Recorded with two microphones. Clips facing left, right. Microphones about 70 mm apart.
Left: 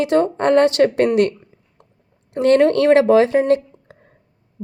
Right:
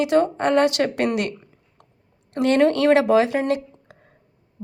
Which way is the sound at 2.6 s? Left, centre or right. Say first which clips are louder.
Left 3 dB; left.